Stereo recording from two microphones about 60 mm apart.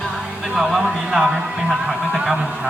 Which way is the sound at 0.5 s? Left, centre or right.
Centre.